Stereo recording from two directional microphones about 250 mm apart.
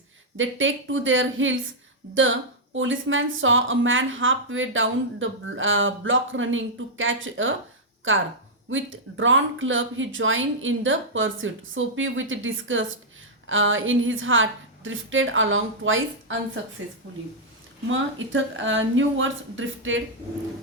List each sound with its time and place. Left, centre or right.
0.3 s a woman's voice: right
17.8 s a woman's voice: right